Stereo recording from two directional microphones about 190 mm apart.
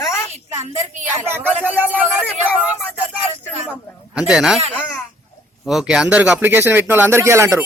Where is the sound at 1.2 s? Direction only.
10° right (ahead or behind).